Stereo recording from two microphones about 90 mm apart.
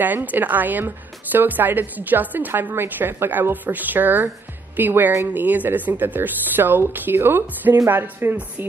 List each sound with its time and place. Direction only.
0.0 s a woman's voice: 20° right (ahead or behind)